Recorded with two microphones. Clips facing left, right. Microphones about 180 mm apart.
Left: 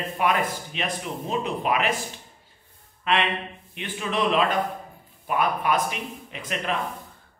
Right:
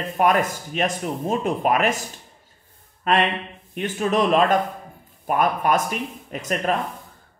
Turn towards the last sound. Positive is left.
turn(degrees=-45)  # may be behind; listen again after turning